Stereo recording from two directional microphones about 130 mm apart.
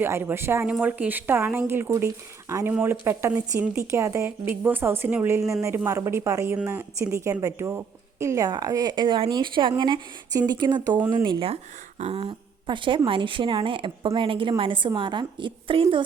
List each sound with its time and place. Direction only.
0.0 s a woman's voice: 15° right (ahead or behind); by 16.0 s 40° right (ahead or behind)